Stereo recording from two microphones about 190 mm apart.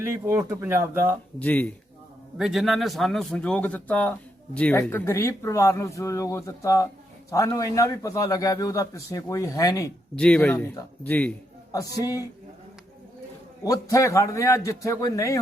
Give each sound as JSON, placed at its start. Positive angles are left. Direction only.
{"t": 0.0, "sound": "speech", "side_deg": -15}
{"t": 1.4, "sound": "a man's voice", "side_deg": 10}
{"t": 10.2, "sound": "a man's voice", "side_deg": 5}
{"t": 11.7, "sound": "a man's voice", "side_deg": 20}
{"t": 13.7, "sound": "a man's voice", "side_deg": 15}